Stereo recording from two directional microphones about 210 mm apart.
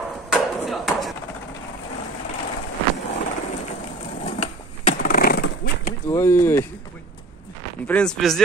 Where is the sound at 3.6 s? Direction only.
30° left (ahead or behind); by 5.7 s 45° left (ahead or behind).